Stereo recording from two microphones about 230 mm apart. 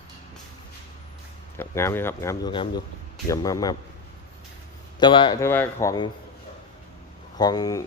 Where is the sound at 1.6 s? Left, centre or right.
Centre.